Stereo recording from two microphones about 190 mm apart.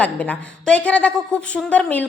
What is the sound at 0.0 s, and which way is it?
A woman's voice, 5° left (ahead or behind).